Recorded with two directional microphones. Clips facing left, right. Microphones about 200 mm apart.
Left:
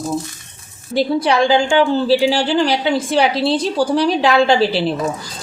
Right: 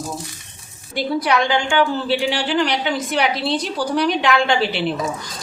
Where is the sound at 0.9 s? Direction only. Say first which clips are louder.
Left 4 dB; 30° left (ahead or behind).